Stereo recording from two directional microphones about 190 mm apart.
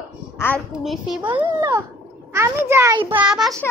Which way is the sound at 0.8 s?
Centre (ahead or behind).